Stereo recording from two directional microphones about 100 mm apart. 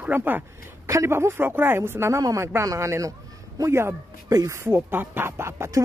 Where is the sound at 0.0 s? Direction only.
20° right (ahead or behind).